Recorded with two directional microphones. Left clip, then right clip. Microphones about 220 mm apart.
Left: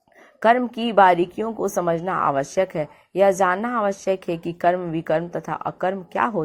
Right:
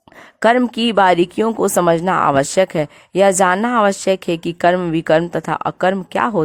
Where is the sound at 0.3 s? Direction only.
35° right (ahead or behind).